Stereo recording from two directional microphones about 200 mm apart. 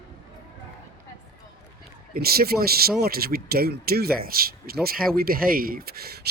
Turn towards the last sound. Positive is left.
turn(degrees=-50)  # may be behind; listen again after turning